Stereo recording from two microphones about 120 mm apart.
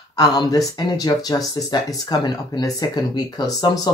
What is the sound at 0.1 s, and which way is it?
Speech, 35° left (ahead or behind).